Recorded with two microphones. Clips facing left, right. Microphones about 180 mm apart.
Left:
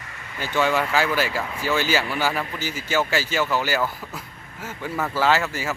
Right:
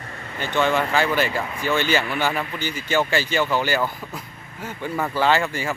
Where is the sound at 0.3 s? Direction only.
5° left (ahead or behind).